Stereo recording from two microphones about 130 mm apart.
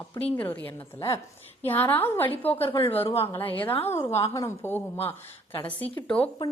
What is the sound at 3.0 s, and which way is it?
Speech, 50° left (ahead or behind).